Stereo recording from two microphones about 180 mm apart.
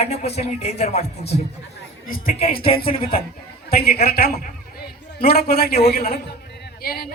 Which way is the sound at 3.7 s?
60° left (ahead or behind).